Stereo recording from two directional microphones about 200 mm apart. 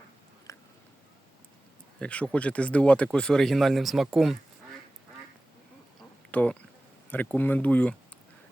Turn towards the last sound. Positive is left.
turn(degrees=5)  # may be behind; listen again after turning